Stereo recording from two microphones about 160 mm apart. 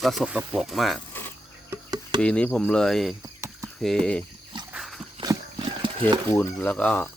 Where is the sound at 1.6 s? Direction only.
25° right (ahead or behind).